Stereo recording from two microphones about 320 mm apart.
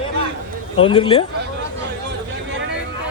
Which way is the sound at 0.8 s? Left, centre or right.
Centre.